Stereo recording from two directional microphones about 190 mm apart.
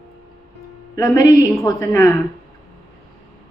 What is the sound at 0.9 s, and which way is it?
A woman's voice, 15° left (ahead or behind).